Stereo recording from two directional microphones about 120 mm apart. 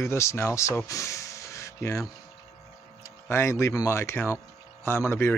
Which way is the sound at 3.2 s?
20° left (ahead or behind).